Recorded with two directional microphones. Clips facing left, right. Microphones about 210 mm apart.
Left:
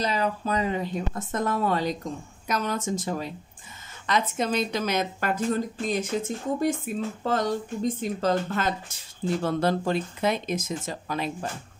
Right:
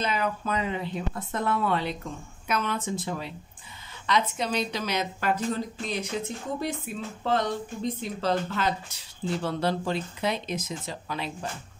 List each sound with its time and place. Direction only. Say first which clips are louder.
0.0 s speech: left 2 dB; 35° left (ahead or behind)